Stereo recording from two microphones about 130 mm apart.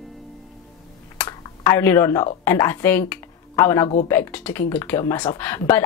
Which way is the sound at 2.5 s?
20° left (ahead or behind).